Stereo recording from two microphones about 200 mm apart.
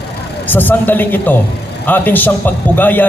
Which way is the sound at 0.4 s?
10° left (ahead or behind).